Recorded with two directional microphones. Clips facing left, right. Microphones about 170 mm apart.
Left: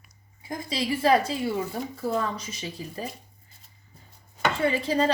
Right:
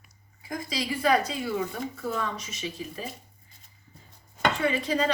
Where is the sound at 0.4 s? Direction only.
25° left (ahead or behind).